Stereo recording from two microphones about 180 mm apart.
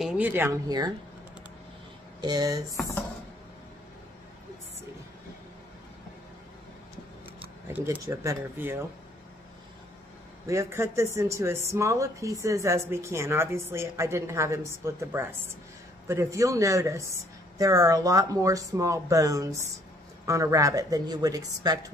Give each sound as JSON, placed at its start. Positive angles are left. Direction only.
{"t": 0.0, "sound": "speech", "side_deg": -10}
{"t": 2.2, "sound": "speech", "side_deg": -20}
{"t": 7.7, "sound": "speech", "side_deg": -15}
{"t": 10.4, "sound": "speech", "side_deg": -15}